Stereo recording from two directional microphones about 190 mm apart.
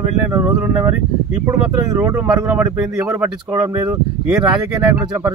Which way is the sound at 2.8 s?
5° right (ahead or behind).